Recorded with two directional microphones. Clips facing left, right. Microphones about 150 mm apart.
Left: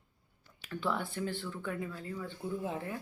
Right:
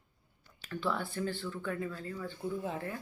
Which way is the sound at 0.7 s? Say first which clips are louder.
Even; 15° left (ahead or behind).